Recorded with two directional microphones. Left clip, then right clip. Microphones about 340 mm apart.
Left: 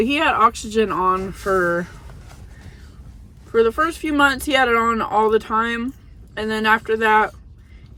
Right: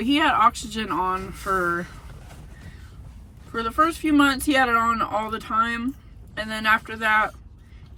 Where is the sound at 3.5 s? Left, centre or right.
Centre.